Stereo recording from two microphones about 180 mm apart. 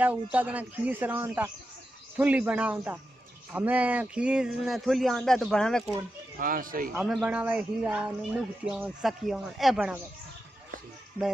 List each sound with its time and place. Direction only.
0.0 s a man's voice: 10° right (ahead or behind)
6.4 s speech: 50° right (ahead or behind)
7.0 s a man's voice: centre (ahead or behind)